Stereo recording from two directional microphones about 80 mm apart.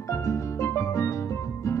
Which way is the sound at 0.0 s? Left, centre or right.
Left.